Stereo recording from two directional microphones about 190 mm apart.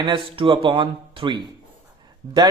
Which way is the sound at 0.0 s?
25° right (ahead or behind).